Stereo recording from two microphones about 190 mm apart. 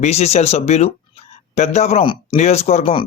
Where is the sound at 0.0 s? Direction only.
35° left (ahead or behind).